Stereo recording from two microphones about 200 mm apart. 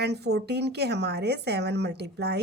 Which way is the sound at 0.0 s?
55° right (ahead or behind).